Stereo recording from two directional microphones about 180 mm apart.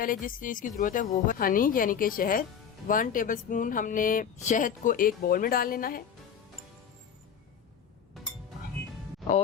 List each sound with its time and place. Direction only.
0.0 s speech: 50° left (ahead or behind)